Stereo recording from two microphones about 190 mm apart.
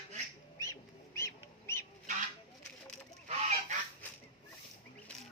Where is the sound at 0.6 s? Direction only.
15° left (ahead or behind).